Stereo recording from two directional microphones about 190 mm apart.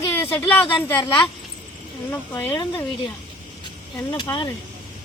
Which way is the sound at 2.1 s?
15° left (ahead or behind).